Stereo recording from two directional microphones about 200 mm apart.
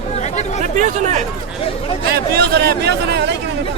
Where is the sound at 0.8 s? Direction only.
35° right (ahead or behind).